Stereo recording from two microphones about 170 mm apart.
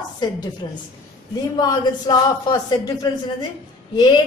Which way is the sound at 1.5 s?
25° left (ahead or behind).